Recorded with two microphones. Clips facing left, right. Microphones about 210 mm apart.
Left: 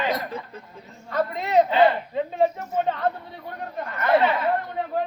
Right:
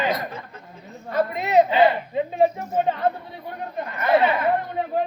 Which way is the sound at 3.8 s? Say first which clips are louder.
Even; 20° right (ahead or behind).